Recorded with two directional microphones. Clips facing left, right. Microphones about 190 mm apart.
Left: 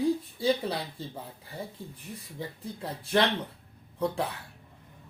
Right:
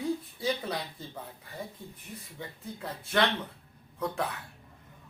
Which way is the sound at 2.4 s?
35° left (ahead or behind).